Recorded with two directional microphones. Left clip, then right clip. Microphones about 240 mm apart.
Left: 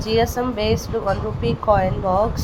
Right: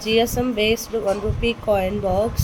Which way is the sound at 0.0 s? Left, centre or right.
Centre.